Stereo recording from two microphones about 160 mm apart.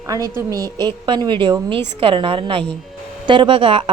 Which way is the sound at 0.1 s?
20° right (ahead or behind).